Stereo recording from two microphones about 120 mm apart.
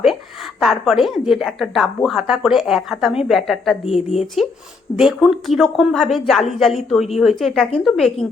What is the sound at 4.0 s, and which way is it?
Speech, 65° left (ahead or behind).